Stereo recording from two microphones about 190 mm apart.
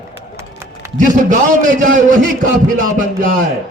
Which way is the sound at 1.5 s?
45° right (ahead or behind).